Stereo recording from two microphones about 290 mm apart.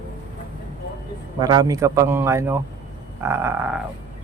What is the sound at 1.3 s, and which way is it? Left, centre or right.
Speech, centre.